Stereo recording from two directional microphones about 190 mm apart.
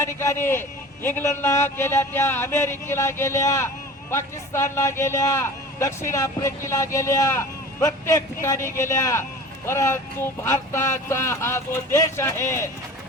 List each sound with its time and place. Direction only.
0.0 s a man's voice: 15° left (ahead or behind)